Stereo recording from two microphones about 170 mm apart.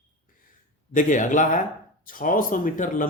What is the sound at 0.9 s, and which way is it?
Speech, 50° left (ahead or behind).